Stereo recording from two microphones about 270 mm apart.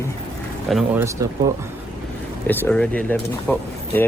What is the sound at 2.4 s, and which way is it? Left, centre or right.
A man's voice, centre.